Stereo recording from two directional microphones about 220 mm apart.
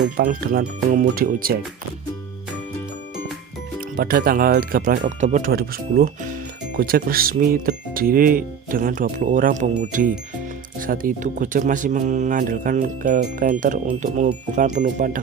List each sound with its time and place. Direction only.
0.2 s speech: 40° right (ahead or behind)
3.8 s speech: 40° right (ahead or behind)